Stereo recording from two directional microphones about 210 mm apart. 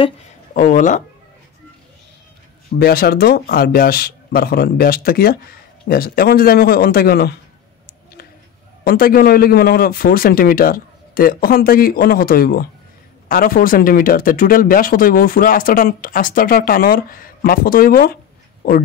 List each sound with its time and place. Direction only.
0.6 s speech: 40° left (ahead or behind)
2.8 s speech: 45° left (ahead or behind)
8.8 s speech: 45° left (ahead or behind)